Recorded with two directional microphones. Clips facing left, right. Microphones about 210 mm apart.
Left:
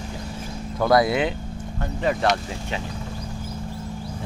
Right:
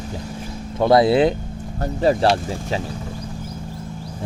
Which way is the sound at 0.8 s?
25° right (ahead or behind).